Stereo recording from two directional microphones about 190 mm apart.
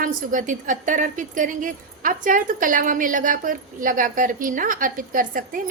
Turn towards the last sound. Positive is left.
turn(degrees=-45)  # may be behind; listen again after turning